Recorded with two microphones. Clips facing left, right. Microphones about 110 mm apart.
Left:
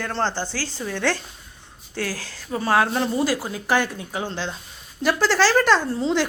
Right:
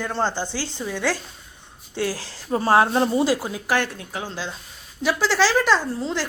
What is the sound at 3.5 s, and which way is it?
Speech, centre (ahead or behind).